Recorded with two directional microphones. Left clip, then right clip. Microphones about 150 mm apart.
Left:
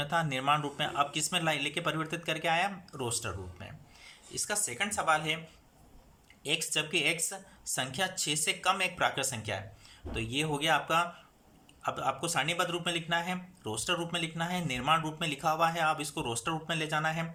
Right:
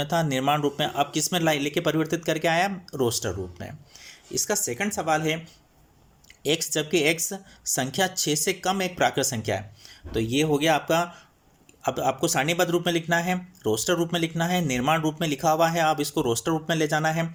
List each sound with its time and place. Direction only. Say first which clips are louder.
0.0 s speech: right 6 dB; 35° right (ahead or behind)
6.4 s speech: right 6 dB; 35° right (ahead or behind)